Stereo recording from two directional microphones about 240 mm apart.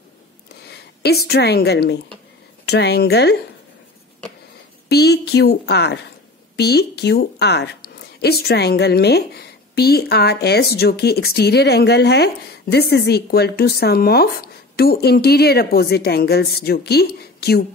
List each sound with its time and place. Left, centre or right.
0.7 s a woman's voice: left
4.8 s a woman's voice: left